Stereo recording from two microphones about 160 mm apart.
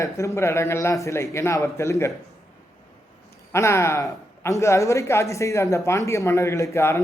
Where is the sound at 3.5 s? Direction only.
15° left (ahead or behind).